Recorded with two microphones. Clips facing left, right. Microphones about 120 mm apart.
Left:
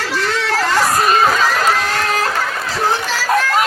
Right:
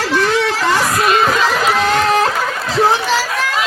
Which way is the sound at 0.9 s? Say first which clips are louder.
Even; 40° left (ahead or behind).